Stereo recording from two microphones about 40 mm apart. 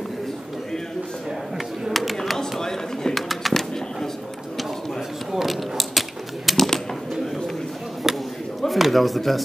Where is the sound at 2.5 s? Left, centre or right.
Centre.